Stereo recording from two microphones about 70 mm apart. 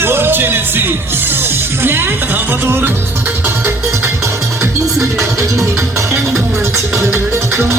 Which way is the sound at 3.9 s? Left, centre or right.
Right.